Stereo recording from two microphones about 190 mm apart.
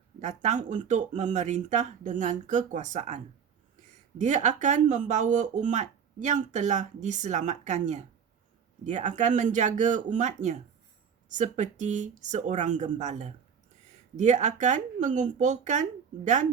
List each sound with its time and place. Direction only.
0.2 s speech: 40° right (ahead or behind)
4.2 s speech: 40° right (ahead or behind)